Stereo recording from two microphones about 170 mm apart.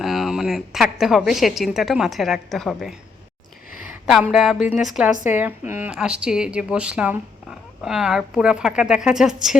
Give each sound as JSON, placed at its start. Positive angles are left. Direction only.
{"t": 0.0, "sound": "a woman's voice", "side_deg": 0}
{"t": 4.0, "sound": "a woman's voice", "side_deg": -5}